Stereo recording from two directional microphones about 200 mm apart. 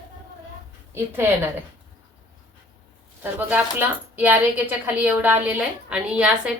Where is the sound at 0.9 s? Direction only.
10° right (ahead or behind).